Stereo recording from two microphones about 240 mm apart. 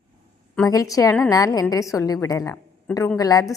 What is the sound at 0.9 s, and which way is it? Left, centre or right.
A woman's voice, centre.